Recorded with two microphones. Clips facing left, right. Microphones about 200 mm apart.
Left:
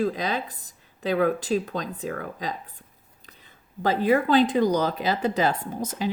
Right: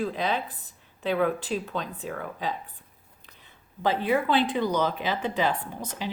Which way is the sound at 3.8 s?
40° left (ahead or behind).